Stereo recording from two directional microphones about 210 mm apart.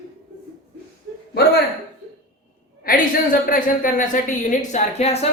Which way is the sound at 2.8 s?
45° left (ahead or behind).